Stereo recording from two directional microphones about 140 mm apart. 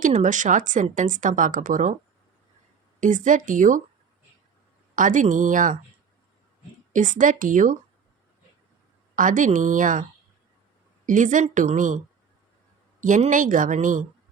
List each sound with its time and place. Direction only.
0.0 s speech: 65° right (ahead or behind)
3.0 s a woman's voice: 65° right (ahead or behind)
4.9 s speech: 65° right (ahead or behind)
6.9 s speech: 65° right (ahead or behind)
9.1 s a woman's voice: 70° right (ahead or behind)
13.0 s speech: 65° right (ahead or behind)